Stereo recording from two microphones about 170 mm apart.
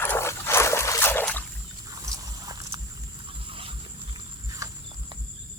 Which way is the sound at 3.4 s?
30° right (ahead or behind).